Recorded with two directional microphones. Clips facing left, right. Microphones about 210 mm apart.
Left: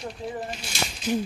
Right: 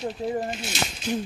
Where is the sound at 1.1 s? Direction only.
10° left (ahead or behind).